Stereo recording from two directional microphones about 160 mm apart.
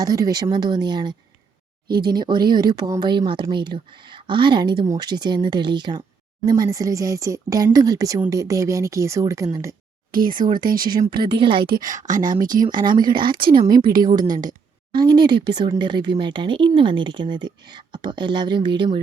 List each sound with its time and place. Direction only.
0.0 s speech: 20° right (ahead or behind)
2.1 s speech: 30° right (ahead or behind)
10.1 s speech: 60° right (ahead or behind)
10.8 s speech: 25° right (ahead or behind)
11.9 s speech: 55° right (ahead or behind)
12.9 s speech: 30° right (ahead or behind)
13.3 s speech: 65° right (ahead or behind)
14.9 s speech: 25° right (ahead or behind)